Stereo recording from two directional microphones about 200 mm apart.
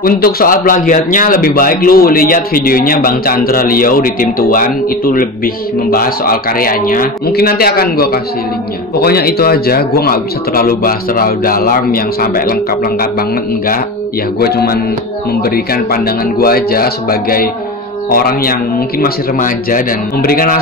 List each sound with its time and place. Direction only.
0.0 s speech: 45° left (ahead or behind)
14.4 s speech: 50° left (ahead or behind)